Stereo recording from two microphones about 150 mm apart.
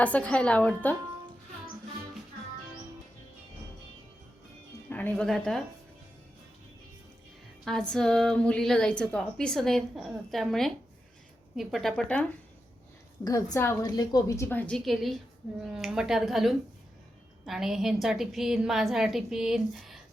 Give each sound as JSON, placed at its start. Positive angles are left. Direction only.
{"t": 0.0, "sound": "a woman's voice", "side_deg": 10}
{"t": 4.9, "sound": "speech", "side_deg": 10}
{"t": 7.6, "sound": "speech", "side_deg": 5}
{"t": 13.2, "sound": "a woman's voice", "side_deg": 20}